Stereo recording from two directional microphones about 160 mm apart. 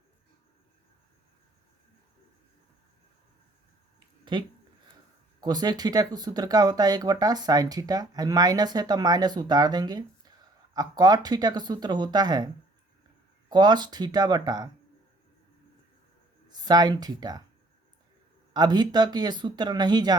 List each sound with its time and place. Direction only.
4.3 s speech: 30° right (ahead or behind)
13.5 s speech: 25° right (ahead or behind)
16.5 s speech: 25° right (ahead or behind)
18.5 s speech: 25° right (ahead or behind)